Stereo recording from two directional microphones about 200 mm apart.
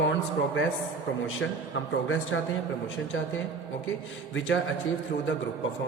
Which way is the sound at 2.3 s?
80° left.